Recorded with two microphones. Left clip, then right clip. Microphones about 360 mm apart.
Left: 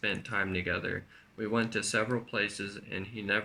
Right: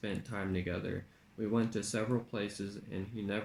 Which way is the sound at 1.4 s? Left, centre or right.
Left.